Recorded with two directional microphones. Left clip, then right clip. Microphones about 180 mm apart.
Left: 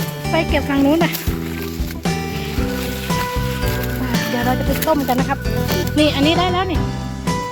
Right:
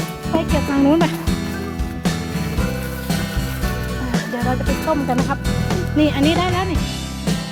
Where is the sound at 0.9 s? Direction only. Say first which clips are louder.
Right 1 dB; 20° right (ahead or behind).